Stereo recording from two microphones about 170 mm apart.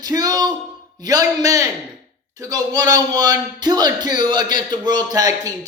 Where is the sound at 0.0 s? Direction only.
20° right (ahead or behind).